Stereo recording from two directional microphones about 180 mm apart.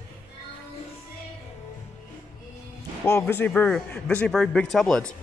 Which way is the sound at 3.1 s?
15° left (ahead or behind).